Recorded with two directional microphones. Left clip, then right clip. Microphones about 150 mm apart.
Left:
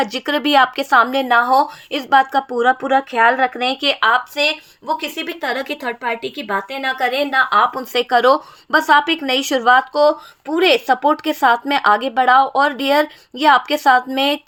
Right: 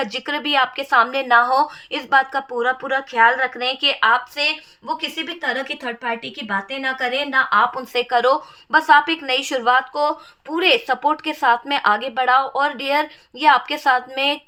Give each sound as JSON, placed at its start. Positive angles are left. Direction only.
{"t": 0.0, "sound": "speech", "side_deg": 50}
{"t": 1.0, "sound": "speech", "side_deg": 35}